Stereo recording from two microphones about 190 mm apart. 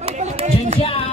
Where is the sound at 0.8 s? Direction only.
30° left (ahead or behind).